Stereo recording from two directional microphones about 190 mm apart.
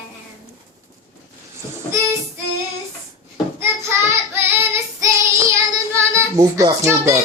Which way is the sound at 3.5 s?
15° right (ahead or behind).